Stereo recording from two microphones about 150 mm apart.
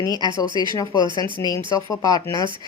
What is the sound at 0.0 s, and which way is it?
Speech, 25° left (ahead or behind).